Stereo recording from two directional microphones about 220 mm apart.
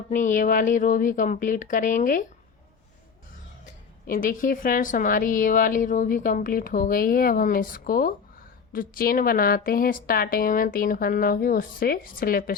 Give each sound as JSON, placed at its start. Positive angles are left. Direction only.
{"t": 0.1, "sound": "a woman's voice", "side_deg": 35}
{"t": 4.0, "sound": "a woman's voice", "side_deg": 40}